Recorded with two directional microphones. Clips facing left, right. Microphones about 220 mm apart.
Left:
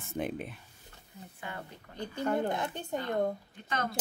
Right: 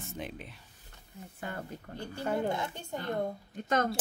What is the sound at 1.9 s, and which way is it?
Speech, 40° right (ahead or behind).